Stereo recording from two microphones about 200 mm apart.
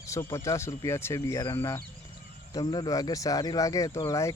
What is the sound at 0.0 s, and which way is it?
Speech, 15° left (ahead or behind).